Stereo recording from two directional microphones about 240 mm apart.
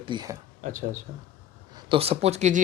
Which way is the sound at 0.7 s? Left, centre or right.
Right.